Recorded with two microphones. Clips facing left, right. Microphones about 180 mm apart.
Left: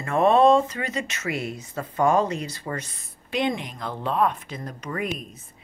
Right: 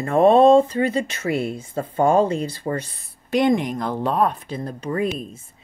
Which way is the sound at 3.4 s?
45° right (ahead or behind).